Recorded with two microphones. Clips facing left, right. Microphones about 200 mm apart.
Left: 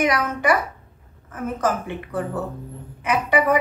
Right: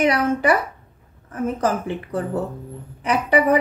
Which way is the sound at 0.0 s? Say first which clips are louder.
Right 3 dB; 30° right (ahead or behind).